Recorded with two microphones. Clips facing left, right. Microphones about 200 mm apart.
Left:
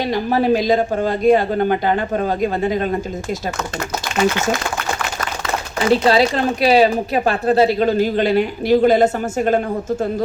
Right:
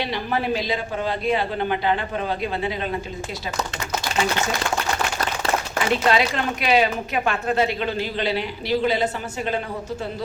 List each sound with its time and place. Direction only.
0.0 s speech: 40° left (ahead or behind)
5.9 s speech: 35° left (ahead or behind)